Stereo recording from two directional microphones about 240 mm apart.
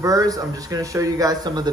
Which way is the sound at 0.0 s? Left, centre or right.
Centre.